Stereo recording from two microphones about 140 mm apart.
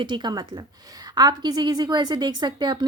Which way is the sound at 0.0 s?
35° right (ahead or behind).